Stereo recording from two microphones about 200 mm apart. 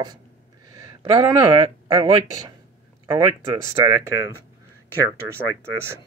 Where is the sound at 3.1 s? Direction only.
15° right (ahead or behind).